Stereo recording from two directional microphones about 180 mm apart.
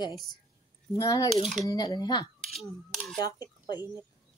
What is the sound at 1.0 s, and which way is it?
A child's voice, 20° left (ahead or behind).